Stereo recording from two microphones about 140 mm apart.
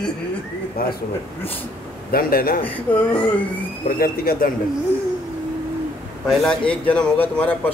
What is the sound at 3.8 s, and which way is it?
Speech, 90° left.